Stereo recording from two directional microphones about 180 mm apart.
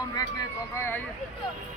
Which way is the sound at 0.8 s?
15° left (ahead or behind).